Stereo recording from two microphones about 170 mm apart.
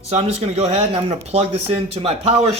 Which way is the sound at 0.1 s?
35° right (ahead or behind).